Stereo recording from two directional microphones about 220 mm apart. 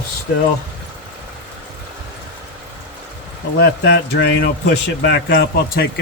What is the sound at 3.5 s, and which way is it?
Speech, 50° left (ahead or behind).